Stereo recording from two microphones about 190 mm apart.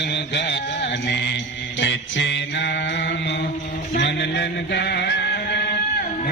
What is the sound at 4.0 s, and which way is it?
Music, 65° left (ahead or behind).